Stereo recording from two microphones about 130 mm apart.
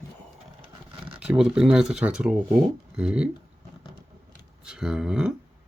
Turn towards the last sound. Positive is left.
turn(degrees=-5)  # may be behind; listen again after turning